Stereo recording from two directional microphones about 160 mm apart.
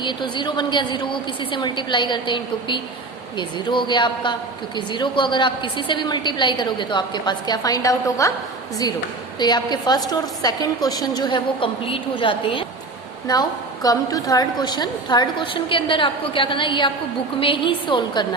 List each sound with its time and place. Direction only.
0.0 s a woman's voice: 30° left (ahead or behind)
9.4 s a woman's voice: 25° left (ahead or behind)